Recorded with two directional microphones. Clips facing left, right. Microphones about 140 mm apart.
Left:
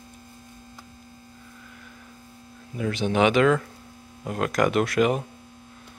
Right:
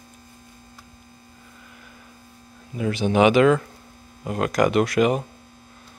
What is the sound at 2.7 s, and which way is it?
Speech, 5° right (ahead or behind).